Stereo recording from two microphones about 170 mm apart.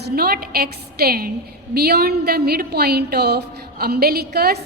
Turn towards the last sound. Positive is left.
turn(degrees=-70)  # may be behind; listen again after turning